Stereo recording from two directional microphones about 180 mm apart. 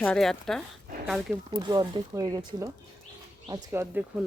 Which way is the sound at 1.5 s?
25° right (ahead or behind).